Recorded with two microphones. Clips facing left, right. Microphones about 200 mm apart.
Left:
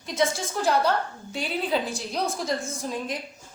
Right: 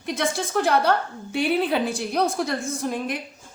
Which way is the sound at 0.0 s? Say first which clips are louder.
Even; 60° right (ahead or behind).